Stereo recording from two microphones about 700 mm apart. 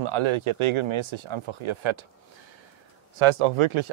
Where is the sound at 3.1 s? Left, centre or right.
Right.